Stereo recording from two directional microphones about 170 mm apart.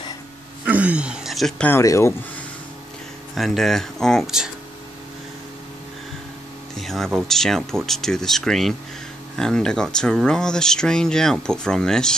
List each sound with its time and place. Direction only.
0.7 s speech: 10° right (ahead or behind)
1.7 s speech: 15° left (ahead or behind)
3.3 s speech: centre (ahead or behind)
6.8 s speech: centre (ahead or behind)